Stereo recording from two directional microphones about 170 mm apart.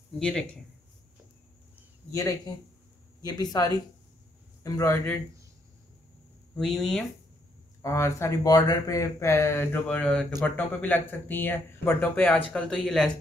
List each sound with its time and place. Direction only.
0.2 s speech: 5° left (ahead or behind)
2.1 s speech: 20° left (ahead or behind)
6.5 s speech: centre (ahead or behind)
7.8 s speech: 15° left (ahead or behind)